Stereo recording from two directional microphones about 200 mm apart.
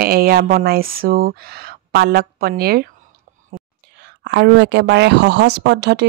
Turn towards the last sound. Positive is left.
turn(degrees=-55)  # may be behind; listen again after turning